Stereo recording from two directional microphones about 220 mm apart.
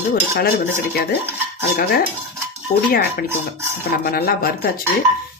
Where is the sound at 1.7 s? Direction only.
45° left (ahead or behind).